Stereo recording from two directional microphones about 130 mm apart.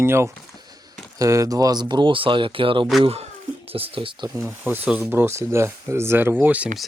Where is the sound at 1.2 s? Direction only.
25° right (ahead or behind); by 4.2 s 40° right (ahead or behind).